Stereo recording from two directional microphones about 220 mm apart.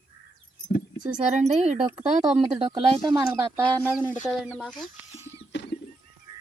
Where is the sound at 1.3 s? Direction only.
30° right (ahead or behind).